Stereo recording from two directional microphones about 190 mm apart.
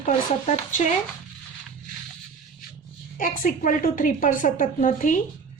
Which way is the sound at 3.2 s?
45° left (ahead or behind).